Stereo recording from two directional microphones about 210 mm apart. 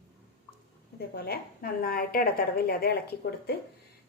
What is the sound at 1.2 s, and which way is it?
A woman's voice, 45° left (ahead or behind).